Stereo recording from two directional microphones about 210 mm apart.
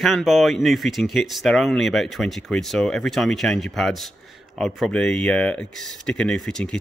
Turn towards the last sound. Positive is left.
turn(degrees=5)  # may be behind; listen again after turning